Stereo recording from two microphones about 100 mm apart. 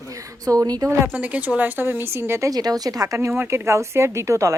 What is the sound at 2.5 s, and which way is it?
Speech, 40° right (ahead or behind).